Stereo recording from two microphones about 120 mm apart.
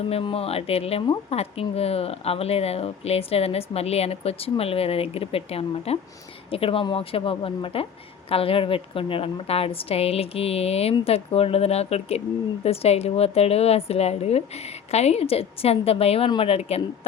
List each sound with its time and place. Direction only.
0.1 s a woman's voice: 50° left (ahead or behind)